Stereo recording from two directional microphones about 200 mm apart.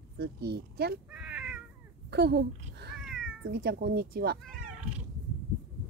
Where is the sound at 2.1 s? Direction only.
55° right (ahead or behind).